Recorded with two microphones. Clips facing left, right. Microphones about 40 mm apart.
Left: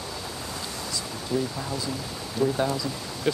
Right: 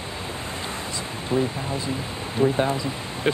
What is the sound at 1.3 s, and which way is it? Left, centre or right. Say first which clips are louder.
Speech: right 4 dB; right.